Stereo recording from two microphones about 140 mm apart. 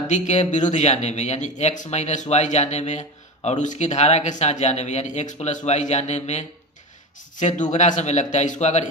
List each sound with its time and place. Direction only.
0.1 s speech: 60° left (ahead or behind)